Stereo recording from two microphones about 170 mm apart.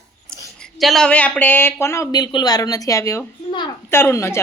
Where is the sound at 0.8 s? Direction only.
Centre (ahead or behind).